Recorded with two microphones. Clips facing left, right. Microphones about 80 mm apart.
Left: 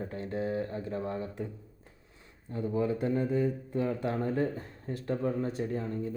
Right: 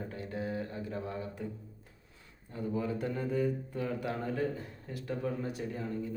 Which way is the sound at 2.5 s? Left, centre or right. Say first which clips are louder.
Left 4 dB; left.